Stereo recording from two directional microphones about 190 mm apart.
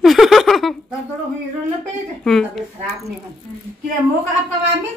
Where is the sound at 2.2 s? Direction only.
Centre (ahead or behind).